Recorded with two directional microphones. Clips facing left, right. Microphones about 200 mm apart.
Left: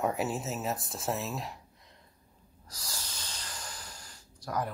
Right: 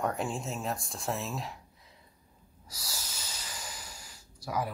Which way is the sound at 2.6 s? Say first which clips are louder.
Even; 10° right (ahead or behind).